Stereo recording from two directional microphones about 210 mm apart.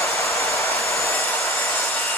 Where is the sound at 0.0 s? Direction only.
15° left (ahead or behind).